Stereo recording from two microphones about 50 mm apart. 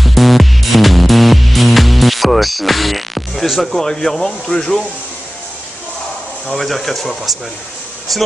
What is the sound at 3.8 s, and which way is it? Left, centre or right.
Speech, centre.